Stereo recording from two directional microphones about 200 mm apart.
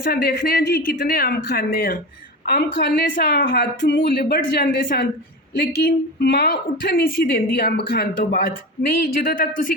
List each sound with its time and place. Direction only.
0.0 s a woman's voice: 50° left (ahead or behind)